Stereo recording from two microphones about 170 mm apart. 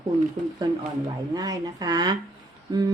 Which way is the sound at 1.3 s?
20° right (ahead or behind).